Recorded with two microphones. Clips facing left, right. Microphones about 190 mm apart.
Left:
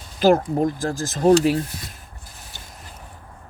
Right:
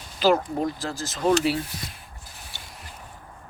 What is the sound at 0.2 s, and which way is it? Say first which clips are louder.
Speech: left 4 dB; 50° left (ahead or behind).